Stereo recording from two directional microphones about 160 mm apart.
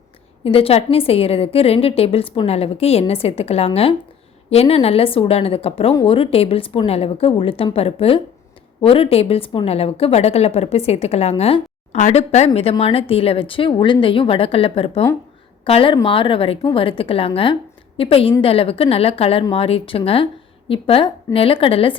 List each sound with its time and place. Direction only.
0.4 s a woman's voice: 35° left (ahead or behind)